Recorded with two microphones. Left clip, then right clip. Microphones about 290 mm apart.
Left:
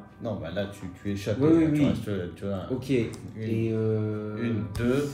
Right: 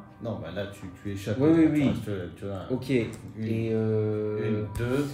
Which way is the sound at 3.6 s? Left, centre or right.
Right.